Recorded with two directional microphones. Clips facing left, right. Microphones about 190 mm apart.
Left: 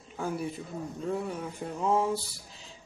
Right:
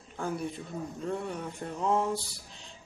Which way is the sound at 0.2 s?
5° left (ahead or behind).